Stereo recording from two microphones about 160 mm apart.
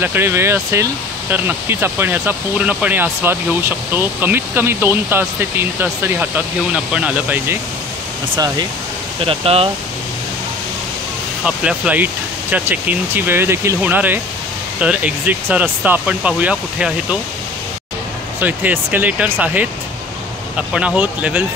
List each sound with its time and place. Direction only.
0.0 s speech: 15° right (ahead or behind)
9.2 s speech: 35° right (ahead or behind)
11.4 s speech: 5° right (ahead or behind)
18.4 s speech: 10° right (ahead or behind)